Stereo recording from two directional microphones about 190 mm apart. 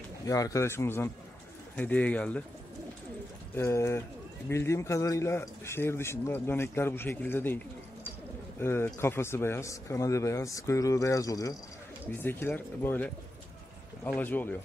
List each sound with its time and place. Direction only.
0.3 s speech: 15° left (ahead or behind)
3.5 s speech: 15° left (ahead or behind)